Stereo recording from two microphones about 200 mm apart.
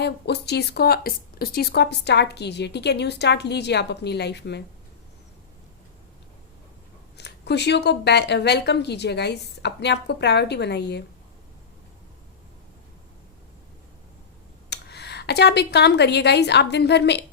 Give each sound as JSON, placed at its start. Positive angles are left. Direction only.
{"t": 0.0, "sound": "speech", "side_deg": 55}
{"t": 7.2, "sound": "speech", "side_deg": 55}
{"t": 14.7, "sound": "speech", "side_deg": 55}